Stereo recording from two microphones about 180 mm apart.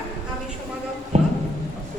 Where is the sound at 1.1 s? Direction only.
40° right (ahead or behind).